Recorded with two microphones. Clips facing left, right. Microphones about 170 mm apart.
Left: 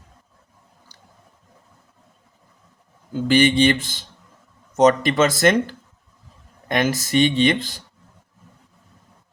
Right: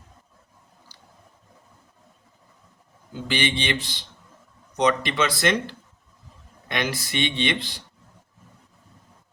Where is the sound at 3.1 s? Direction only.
45° left (ahead or behind).